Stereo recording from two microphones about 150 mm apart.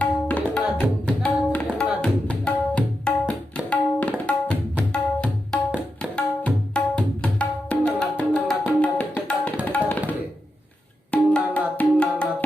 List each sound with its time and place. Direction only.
0.0 s tabla: 10° left (ahead or behind)
9.6 s music: 10° left (ahead or behind)
11.1 s tabla: 10° left (ahead or behind)